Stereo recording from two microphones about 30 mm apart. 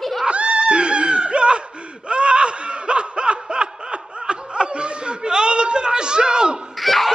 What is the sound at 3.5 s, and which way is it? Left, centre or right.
Snicker, right.